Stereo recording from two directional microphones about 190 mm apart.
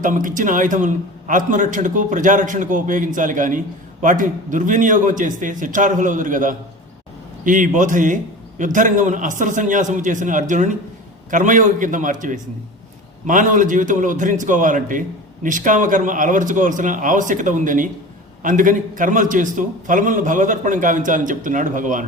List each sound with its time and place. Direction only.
0.0 s a man's voice: 45° right (ahead or behind)